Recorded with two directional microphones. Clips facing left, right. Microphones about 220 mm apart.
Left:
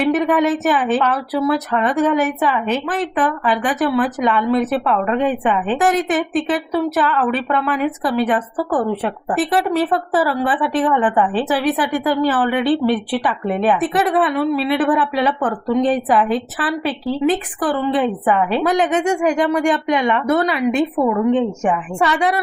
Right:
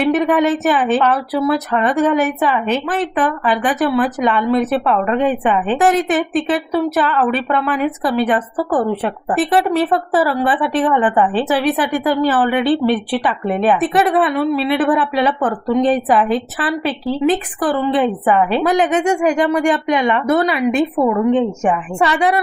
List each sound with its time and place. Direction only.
0.1 s a woman's voice: 25° right (ahead or behind)
18.6 s a woman's voice: 10° right (ahead or behind)